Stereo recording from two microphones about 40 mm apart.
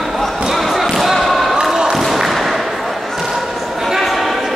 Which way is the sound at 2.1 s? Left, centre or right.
Centre.